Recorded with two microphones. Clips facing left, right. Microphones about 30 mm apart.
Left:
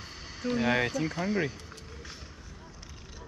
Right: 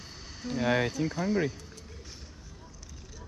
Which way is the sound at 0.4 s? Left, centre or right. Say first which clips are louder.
Left 1 dB; left.